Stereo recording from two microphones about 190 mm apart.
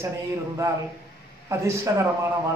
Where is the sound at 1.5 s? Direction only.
15° right (ahead or behind).